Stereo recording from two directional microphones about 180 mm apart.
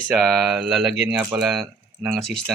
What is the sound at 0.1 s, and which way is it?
Speech, centre (ahead or behind).